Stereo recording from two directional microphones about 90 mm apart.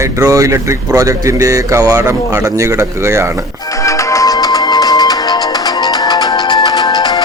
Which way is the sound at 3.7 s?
35° left (ahead or behind).